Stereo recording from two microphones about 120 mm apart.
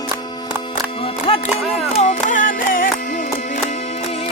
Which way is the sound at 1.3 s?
45° left (ahead or behind).